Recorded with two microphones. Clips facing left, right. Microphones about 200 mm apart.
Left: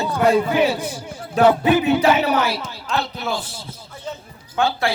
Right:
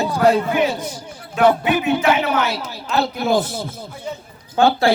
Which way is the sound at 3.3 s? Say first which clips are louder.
Right 9 dB; 50° right (ahead or behind).